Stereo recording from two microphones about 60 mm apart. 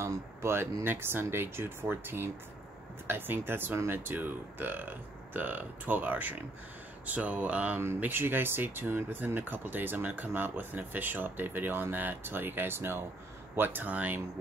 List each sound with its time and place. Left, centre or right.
0.0 s speech: right
8.0 s speech: right
13.6 s speech: right